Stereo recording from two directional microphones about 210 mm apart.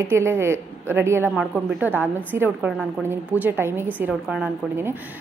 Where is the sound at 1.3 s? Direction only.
Centre (ahead or behind).